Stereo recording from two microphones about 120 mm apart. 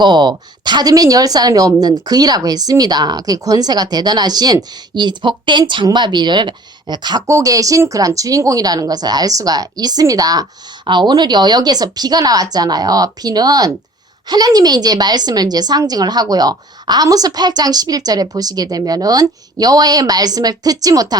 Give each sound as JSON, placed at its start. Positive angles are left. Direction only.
{"t": 0.0, "sound": "a woman's voice", "side_deg": -40}